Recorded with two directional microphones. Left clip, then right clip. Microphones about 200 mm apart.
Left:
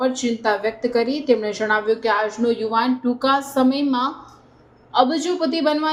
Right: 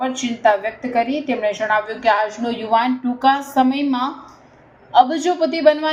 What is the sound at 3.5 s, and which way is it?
A woman's voice, 30° left (ahead or behind).